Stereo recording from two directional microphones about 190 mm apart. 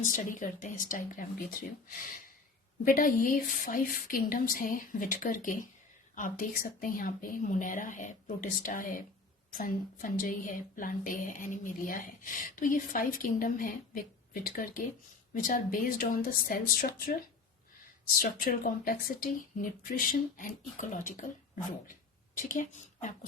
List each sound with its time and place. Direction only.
0.0 s a woman's voice: 45° left (ahead or behind)
2.8 s a woman's voice: 45° left (ahead or behind)